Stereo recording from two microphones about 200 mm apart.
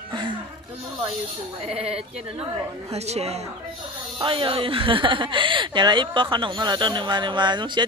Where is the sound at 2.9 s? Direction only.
30° right (ahead or behind).